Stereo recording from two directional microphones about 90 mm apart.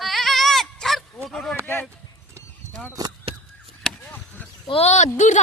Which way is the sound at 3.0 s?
45° right (ahead or behind).